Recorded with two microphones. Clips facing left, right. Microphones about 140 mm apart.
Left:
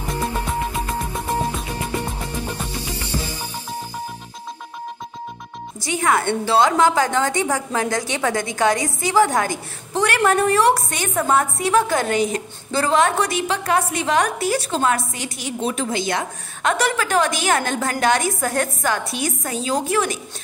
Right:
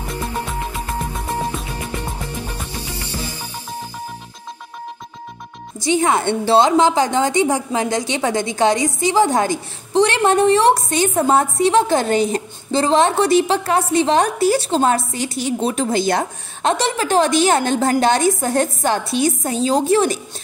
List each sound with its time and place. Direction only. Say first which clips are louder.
5.8 s a woman's voice: right 3 dB; 25° right (ahead or behind)